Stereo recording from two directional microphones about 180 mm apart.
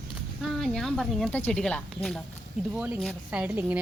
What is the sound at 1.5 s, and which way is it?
Speech, 5° left (ahead or behind).